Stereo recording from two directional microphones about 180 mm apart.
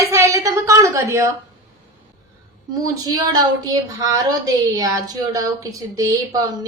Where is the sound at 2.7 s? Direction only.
20° right (ahead or behind).